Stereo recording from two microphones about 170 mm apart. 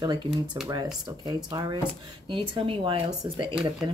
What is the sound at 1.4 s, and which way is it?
Speech, 25° right (ahead or behind).